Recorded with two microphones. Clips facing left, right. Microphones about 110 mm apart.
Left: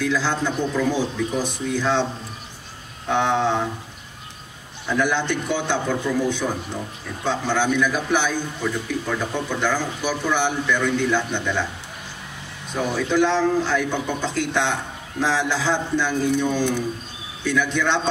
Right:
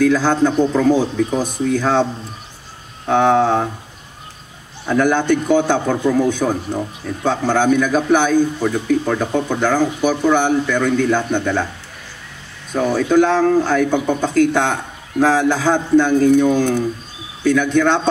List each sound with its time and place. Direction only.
0.0 s a man's voice: 50° right (ahead or behind)
3.1 s a man's voice: 45° right (ahead or behind)
4.8 s a man's voice: 50° right (ahead or behind)
12.9 s a man's voice: 50° right (ahead or behind)